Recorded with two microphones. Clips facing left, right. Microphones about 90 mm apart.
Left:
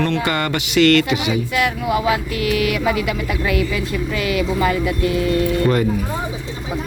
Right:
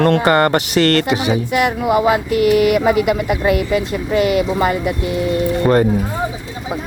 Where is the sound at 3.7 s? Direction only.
30° right (ahead or behind).